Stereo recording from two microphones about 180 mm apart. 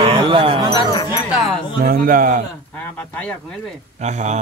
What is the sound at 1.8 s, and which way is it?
Speech, 50° right (ahead or behind).